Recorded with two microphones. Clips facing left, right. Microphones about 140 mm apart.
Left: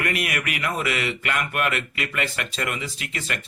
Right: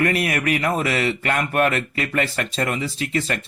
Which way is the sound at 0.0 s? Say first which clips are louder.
Right 6 dB; 35° right (ahead or behind).